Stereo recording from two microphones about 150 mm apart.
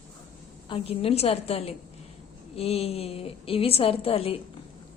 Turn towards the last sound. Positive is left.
turn(degrees=40)  # may be behind; listen again after turning